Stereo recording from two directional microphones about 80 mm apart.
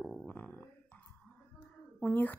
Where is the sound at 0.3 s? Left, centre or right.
Left.